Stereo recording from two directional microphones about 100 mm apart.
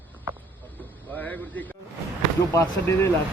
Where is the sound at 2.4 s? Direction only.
35° left (ahead or behind).